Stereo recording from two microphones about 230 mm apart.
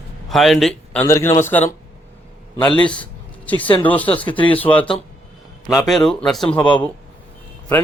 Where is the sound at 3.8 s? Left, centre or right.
Centre.